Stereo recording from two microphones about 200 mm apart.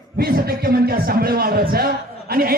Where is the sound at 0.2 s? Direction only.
50° right (ahead or behind).